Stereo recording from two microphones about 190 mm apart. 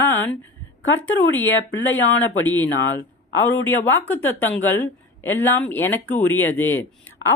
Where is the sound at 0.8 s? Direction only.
85° left.